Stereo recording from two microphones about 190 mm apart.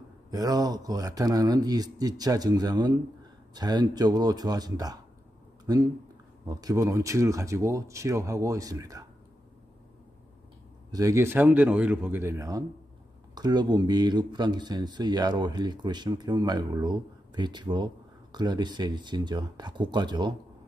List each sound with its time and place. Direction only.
0.3 s speech: 20° right (ahead or behind)
10.9 s speech: 20° right (ahead or behind)